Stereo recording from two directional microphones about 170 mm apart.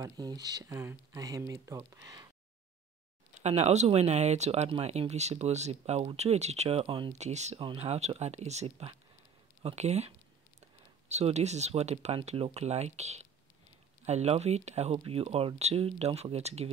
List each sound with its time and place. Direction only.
0.0 s speech: 20° right (ahead or behind)
3.3 s speech: 40° right (ahead or behind)